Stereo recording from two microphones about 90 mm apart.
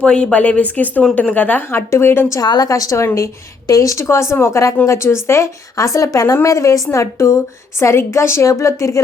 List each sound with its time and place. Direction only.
0.0 s a woman's voice: 10° left (ahead or behind); by 2.4 s 30° left (ahead or behind)
2.4 s a woman's voice: 50° left (ahead or behind)